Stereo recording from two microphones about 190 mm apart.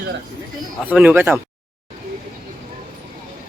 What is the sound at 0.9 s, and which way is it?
Speech, 10° right (ahead or behind).